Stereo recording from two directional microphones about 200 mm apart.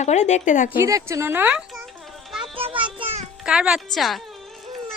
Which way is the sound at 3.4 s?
5° right (ahead or behind).